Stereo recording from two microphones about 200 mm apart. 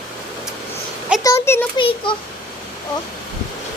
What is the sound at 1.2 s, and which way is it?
Speech, 15° left (ahead or behind).